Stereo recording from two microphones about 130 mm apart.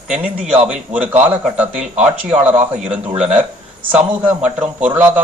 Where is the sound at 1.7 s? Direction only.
60° right (ahead or behind).